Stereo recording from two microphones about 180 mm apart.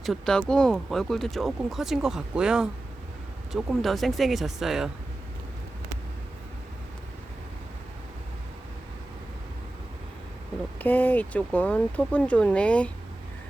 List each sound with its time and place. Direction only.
0.0 s speech: centre (ahead or behind)
10.8 s speech: 10° left (ahead or behind)